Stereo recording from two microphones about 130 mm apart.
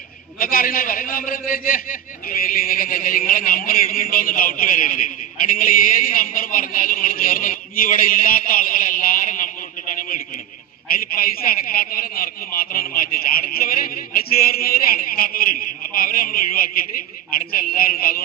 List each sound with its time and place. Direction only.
0.3 s speech: 90° left